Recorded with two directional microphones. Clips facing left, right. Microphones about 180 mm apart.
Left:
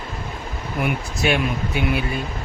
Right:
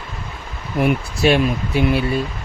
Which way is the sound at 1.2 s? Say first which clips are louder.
Right 5 dB; 30° right (ahead or behind).